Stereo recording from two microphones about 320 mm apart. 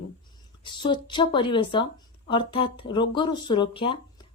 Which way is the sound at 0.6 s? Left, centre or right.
Centre.